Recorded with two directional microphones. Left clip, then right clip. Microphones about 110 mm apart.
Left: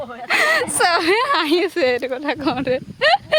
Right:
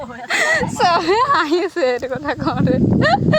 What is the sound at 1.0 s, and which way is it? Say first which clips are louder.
Speech: right 2 dB; 50° left (ahead or behind).